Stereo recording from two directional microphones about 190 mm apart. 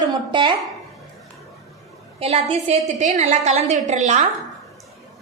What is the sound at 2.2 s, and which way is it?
A woman's voice, 30° right (ahead or behind).